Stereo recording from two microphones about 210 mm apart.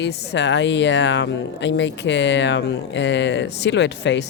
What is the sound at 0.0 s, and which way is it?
Speech, 55° left (ahead or behind).